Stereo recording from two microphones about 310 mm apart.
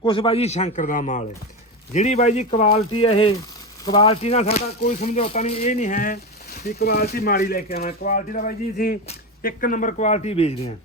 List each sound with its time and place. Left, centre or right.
0.0 s speech: centre